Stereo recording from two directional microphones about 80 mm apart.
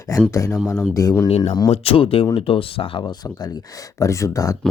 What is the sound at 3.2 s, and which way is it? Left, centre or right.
Speech, left.